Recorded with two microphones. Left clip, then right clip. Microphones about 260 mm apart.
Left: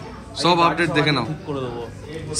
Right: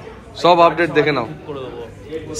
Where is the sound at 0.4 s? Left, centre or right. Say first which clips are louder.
Right 5 dB; centre.